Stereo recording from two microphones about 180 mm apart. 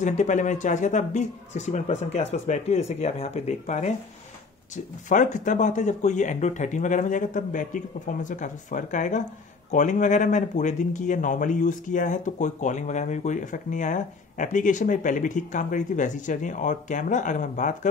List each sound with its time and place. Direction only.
0.0 s speech: 45° left (ahead or behind)